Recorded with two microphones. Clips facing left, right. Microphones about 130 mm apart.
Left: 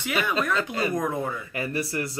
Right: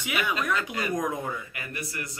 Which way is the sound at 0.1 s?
35° left (ahead or behind).